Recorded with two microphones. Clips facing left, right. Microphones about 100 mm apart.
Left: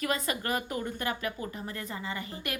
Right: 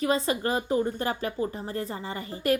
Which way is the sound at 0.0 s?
30° right (ahead or behind).